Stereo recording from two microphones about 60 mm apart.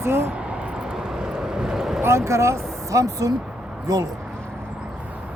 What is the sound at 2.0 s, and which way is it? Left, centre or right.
Speech, right.